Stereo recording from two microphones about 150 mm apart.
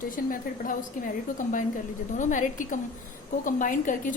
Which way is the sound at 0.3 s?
65° left (ahead or behind).